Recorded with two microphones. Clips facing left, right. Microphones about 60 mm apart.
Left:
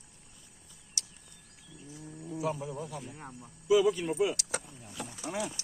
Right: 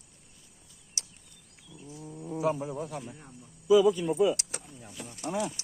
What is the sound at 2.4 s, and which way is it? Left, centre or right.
Speech, right.